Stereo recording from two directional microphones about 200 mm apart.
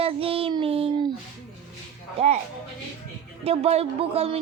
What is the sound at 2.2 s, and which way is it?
Child singing, 30° right (ahead or behind).